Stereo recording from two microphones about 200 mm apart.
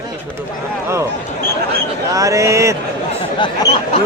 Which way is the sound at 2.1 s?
15° right (ahead or behind).